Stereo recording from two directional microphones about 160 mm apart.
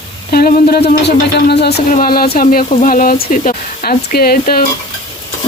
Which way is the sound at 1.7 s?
55° left (ahead or behind).